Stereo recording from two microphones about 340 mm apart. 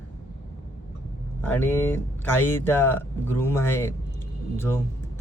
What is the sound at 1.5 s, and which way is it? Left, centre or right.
A man's voice, centre.